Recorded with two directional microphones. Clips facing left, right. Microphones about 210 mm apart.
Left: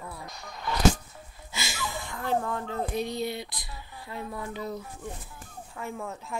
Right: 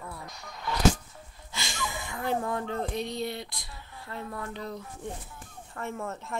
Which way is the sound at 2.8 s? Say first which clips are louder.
Left 2 dB; 5° left (ahead or behind).